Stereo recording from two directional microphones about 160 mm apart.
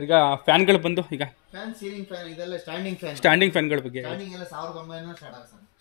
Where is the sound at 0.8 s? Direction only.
35° left (ahead or behind).